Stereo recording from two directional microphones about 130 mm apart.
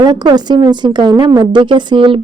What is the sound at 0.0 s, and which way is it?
A woman's voice, 35° right (ahead or behind).